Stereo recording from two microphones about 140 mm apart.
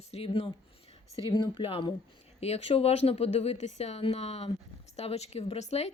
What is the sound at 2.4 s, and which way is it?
A woman's voice, 50° left (ahead or behind).